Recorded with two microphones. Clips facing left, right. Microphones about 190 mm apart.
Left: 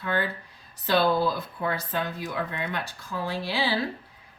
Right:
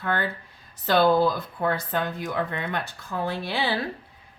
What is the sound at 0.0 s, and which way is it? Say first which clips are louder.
Speech: right 1 dB; 55° right (ahead or behind).